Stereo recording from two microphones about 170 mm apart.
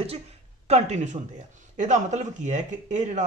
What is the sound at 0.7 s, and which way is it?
Speech, 40° right (ahead or behind).